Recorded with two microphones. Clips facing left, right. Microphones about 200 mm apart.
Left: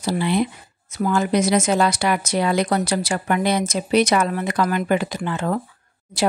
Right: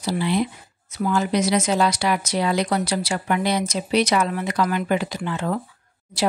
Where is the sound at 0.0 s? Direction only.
55° left (ahead or behind).